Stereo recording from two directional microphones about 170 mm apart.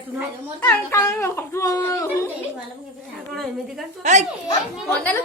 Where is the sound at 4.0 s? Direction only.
45° right (ahead or behind).